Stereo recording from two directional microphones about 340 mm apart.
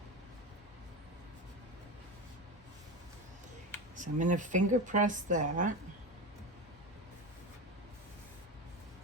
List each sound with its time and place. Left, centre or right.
3.9 s a woman's voice: right